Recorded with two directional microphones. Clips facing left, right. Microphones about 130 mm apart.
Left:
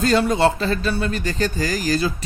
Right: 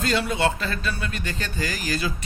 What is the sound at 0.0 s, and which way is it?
Speech, 40° left (ahead or behind).